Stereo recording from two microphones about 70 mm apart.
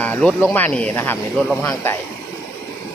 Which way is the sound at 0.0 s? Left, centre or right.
Centre.